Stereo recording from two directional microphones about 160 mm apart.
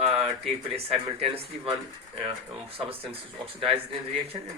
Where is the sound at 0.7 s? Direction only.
40° right (ahead or behind).